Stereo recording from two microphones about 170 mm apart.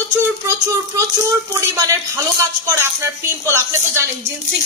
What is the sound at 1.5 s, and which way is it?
A man's voice, 20° right (ahead or behind).